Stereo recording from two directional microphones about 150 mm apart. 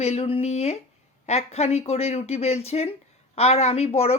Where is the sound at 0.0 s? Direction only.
45° left (ahead or behind).